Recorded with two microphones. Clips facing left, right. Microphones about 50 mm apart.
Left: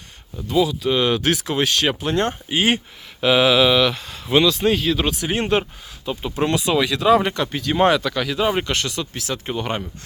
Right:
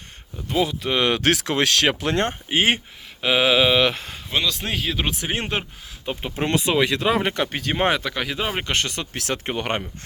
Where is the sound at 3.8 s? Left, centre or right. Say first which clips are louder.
Left 1 dB; right.